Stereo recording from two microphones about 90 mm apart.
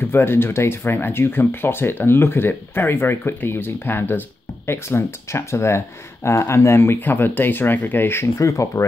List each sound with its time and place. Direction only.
0.0 s speech: 25° left (ahead or behind)
8.4 s speech: 35° left (ahead or behind)